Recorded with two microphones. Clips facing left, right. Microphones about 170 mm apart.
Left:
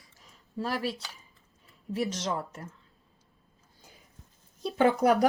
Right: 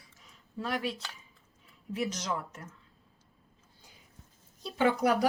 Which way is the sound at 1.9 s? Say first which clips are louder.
Left 3 dB; 30° left (ahead or behind).